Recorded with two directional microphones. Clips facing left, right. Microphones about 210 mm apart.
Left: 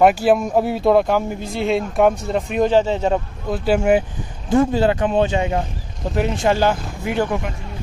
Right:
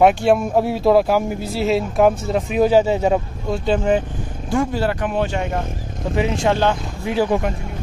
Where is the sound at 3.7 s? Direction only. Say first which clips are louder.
Left 2 dB; 10° left (ahead or behind).